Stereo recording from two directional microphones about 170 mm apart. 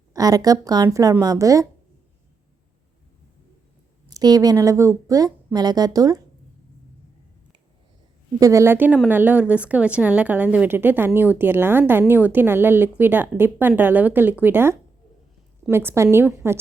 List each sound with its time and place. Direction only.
0.1 s speech: 20° right (ahead or behind)
4.0 s speech: 20° right (ahead or behind)
8.4 s a woman's voice: 20° right (ahead or behind)